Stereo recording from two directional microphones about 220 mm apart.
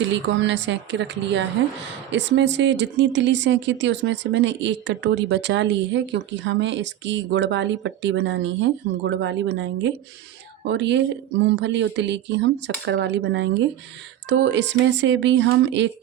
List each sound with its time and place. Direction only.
0.1 s speech: 55° right (ahead or behind)